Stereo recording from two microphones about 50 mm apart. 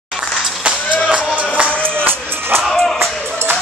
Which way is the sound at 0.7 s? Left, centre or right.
Centre.